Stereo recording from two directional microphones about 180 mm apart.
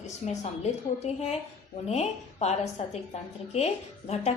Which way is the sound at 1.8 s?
35° left (ahead or behind).